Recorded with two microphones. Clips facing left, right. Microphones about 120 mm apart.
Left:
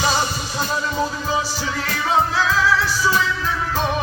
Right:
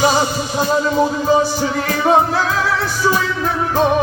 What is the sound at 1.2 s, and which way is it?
Music, 50° right (ahead or behind).